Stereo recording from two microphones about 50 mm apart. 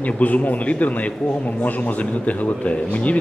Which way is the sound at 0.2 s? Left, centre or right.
Left.